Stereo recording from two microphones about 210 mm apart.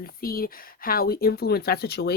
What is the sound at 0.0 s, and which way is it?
Speech, 45° left (ahead or behind).